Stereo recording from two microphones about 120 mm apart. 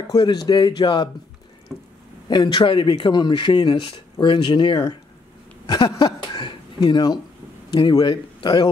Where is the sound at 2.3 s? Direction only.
40° left (ahead or behind).